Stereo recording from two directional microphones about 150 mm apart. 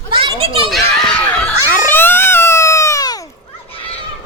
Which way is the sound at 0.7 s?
10° left (ahead or behind).